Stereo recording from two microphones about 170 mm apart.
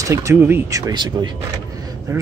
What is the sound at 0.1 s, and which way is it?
Speech, 15° right (ahead or behind).